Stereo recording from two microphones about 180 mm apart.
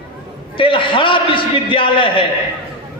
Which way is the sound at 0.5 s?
30° left (ahead or behind).